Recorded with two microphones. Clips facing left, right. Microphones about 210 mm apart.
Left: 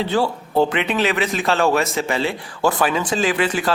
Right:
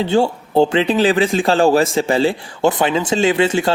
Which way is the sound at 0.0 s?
30° right (ahead or behind).